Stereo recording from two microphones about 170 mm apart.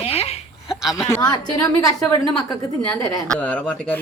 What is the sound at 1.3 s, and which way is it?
Speech, 20° left (ahead or behind).